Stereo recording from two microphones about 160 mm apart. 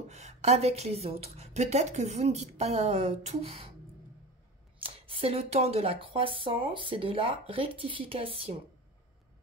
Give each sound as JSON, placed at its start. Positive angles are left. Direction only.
{"t": 0.1, "sound": "speech", "side_deg": -45}
{"t": 4.8, "sound": "speech", "side_deg": -35}